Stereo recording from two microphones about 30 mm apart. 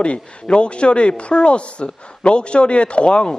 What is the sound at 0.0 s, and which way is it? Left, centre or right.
Speech, left.